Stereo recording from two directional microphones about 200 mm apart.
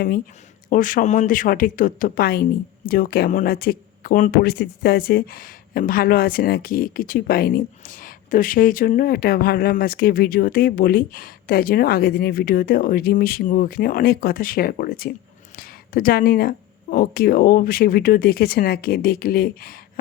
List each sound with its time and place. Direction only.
0.7 s speech: 40° left (ahead or behind)